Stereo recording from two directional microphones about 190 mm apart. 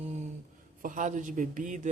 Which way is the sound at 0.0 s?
35° right (ahead or behind).